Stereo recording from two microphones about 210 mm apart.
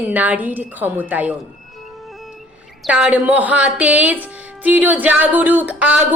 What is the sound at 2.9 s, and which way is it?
A woman's voice, 5° right (ahead or behind).